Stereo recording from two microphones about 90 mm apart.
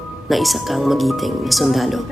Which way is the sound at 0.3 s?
Centre (ahead or behind).